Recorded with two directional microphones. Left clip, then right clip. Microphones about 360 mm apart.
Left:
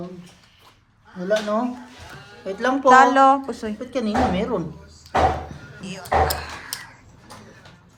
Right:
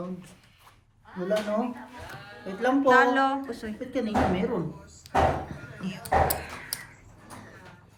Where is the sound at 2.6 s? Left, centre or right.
Centre.